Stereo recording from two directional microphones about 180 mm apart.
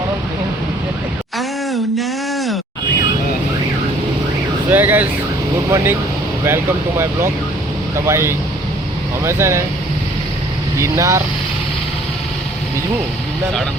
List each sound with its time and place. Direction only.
1.4 s a sound: centre (ahead or behind)
4.7 s speech: 10° right (ahead or behind)
10.8 s speech: 15° right (ahead or behind)